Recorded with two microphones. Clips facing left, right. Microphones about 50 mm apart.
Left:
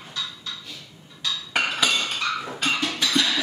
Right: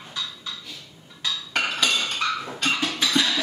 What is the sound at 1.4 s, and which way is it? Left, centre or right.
Dishes, centre.